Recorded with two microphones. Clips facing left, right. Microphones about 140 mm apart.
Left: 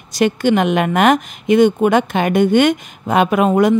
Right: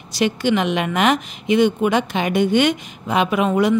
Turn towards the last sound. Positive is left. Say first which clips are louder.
# left 4 dB
turn(degrees=50)  # may be behind; listen again after turning